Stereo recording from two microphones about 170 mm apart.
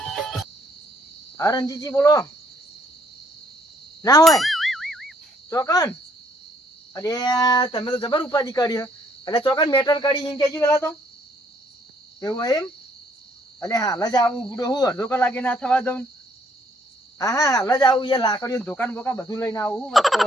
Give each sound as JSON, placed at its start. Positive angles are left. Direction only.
{"t": 0.0, "sound": "cricket", "side_deg": 0}
{"t": 1.4, "sound": "speech", "side_deg": 20}
{"t": 4.2, "sound": "clang", "side_deg": 0}
{"t": 5.5, "sound": "speech", "side_deg": 20}
{"t": 6.9, "sound": "speech", "side_deg": 20}
{"t": 12.2, "sound": "speech", "side_deg": 20}
{"t": 17.2, "sound": "speech", "side_deg": 20}
{"t": 19.8, "sound": "speech", "side_deg": 0}